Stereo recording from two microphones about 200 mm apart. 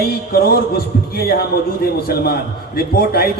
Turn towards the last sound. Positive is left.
turn(degrees=50)  # may be behind; listen again after turning